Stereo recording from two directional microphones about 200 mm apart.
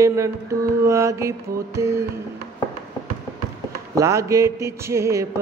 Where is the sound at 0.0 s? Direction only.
15° right (ahead or behind).